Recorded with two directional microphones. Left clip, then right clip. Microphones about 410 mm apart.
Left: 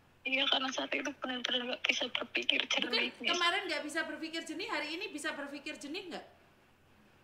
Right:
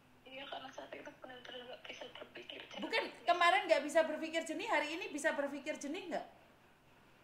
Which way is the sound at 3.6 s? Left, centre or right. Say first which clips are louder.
Right 5 dB; centre.